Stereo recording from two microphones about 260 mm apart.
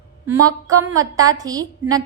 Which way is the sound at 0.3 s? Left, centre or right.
Centre.